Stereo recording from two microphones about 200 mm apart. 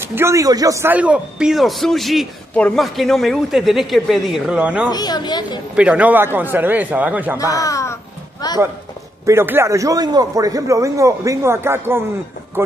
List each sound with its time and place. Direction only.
0.0 s a man's voice: 10° right (ahead or behind)
4.9 s a woman's voice: 20° left (ahead or behind)
5.8 s a man's voice: 5° right (ahead or behind)
7.3 s speech: 15° left (ahead or behind)
9.2 s a man's voice: 10° right (ahead or behind)